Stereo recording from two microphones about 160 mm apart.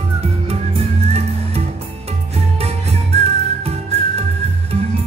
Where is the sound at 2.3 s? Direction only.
40° right (ahead or behind).